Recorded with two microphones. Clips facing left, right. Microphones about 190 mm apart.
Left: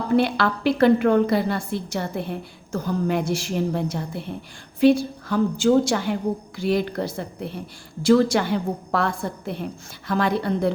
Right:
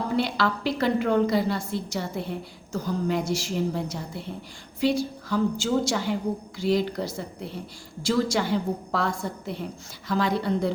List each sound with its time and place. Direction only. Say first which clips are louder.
0.2 s a woman's voice: left 4 dB; 55° left (ahead or behind)